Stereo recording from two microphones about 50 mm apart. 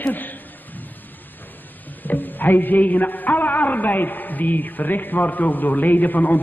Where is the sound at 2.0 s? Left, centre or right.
Left.